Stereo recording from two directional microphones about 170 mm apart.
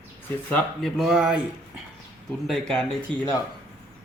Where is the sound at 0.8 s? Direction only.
Centre (ahead or behind).